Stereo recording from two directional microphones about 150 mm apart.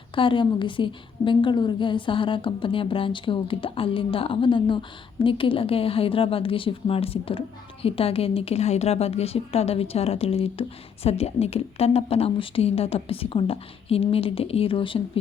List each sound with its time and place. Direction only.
0.2 s a woman's voice: 35° left (ahead or behind)